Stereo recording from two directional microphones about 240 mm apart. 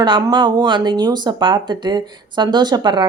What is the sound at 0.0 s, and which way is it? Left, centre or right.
Speech, centre.